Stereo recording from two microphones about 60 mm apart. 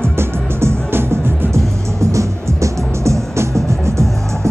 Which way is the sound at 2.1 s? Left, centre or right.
Right.